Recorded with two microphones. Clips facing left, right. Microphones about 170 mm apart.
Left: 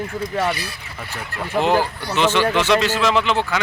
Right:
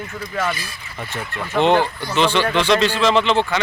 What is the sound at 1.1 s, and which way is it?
A man's voice, 5° left (ahead or behind).